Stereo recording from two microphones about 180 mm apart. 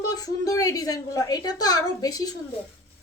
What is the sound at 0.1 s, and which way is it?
A woman's voice, 20° left (ahead or behind).